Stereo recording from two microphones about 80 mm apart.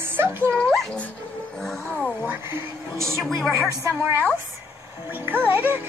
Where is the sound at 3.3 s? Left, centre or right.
Centre.